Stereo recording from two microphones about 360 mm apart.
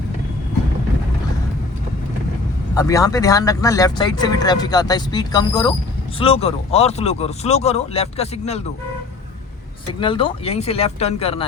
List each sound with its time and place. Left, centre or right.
2.7 s speech: centre
10.0 s speech: centre